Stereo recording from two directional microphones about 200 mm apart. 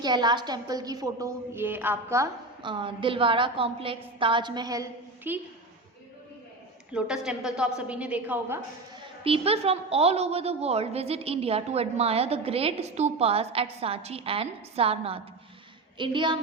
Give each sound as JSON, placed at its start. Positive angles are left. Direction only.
{"t": 0.0, "sound": "a woman's voice", "side_deg": -20}
{"t": 6.9, "sound": "a woman's voice", "side_deg": -5}
{"t": 9.2, "sound": "a woman's voice", "side_deg": -30}